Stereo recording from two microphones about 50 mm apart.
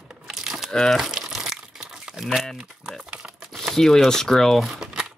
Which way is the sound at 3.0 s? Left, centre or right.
Centre.